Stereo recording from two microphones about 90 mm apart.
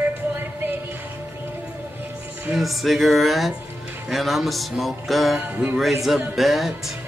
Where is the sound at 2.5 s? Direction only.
Centre (ahead or behind).